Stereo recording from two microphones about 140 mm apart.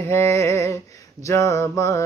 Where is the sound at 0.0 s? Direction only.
20° left (ahead or behind).